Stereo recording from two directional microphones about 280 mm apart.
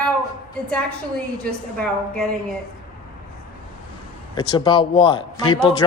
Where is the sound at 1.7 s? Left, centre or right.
Centre.